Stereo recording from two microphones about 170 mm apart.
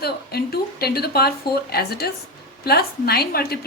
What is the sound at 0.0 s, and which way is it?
A woman's voice, 65° left (ahead or behind).